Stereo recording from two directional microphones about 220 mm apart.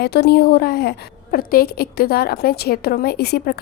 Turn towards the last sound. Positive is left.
turn(degrees=45)  # may be behind; listen again after turning